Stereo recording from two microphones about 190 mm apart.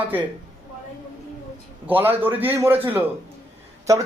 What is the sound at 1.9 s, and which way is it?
Speech, 10° right (ahead or behind).